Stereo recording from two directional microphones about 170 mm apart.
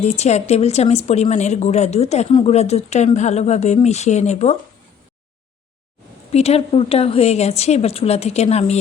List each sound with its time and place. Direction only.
0.0 s speech: 40° left (ahead or behind)
6.3 s speech: 35° left (ahead or behind)